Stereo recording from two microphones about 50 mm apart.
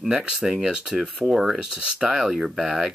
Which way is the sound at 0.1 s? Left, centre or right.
Centre.